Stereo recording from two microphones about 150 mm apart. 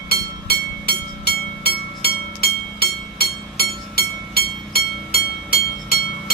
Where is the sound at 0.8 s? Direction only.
90° left.